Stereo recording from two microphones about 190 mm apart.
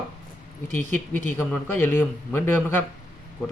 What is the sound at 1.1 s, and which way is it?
A man's voice, 10° left (ahead or behind).